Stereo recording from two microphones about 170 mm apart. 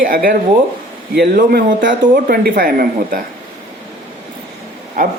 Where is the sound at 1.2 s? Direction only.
70° right (ahead or behind).